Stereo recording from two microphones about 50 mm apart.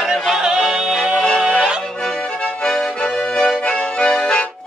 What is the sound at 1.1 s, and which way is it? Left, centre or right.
Music, centre.